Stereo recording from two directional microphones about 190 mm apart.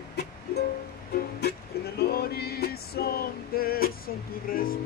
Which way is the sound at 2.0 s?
55° left (ahead or behind).